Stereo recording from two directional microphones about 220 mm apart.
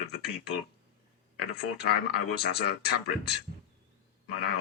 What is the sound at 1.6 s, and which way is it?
Speech, 45° left (ahead or behind).